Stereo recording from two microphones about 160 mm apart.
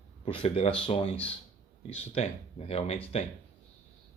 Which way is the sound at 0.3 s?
35° left (ahead or behind).